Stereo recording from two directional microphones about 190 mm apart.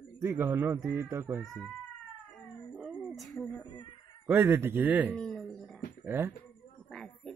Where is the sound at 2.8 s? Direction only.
5° right (ahead or behind).